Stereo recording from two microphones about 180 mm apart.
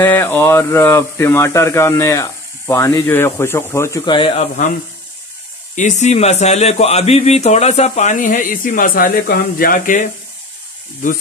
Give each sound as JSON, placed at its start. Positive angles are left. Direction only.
{"t": 0.0, "sound": "speech", "side_deg": 10}
{"t": 4.1, "sound": "speech", "side_deg": 30}
{"t": 5.8, "sound": "speech", "side_deg": 40}